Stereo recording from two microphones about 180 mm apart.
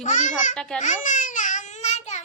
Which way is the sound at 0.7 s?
45° left (ahead or behind).